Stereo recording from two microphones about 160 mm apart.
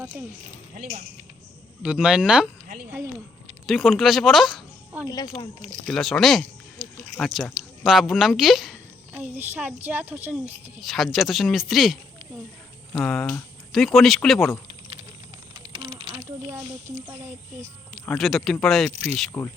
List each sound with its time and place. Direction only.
0.0 s speech: 15° right (ahead or behind)
0.7 s speech: 50° right (ahead or behind)
1.8 s speech: 5° right (ahead or behind)
3.7 s speech: centre (ahead or behind)
5.0 s speech: 25° left (ahead or behind)
5.9 s a woman's voice: centre (ahead or behind)
10.8 s speech: centre (ahead or behind)
13.0 s speech: centre (ahead or behind)
15.5 s a sound: 30° right (ahead or behind)
17.9 s speech: 5° left (ahead or behind)
18.9 s speech: 40° right (ahead or behind)
19.3 s speech: 5° left (ahead or behind)